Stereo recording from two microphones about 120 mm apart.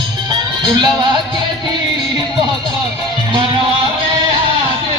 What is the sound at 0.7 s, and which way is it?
Music, 35° right (ahead or behind).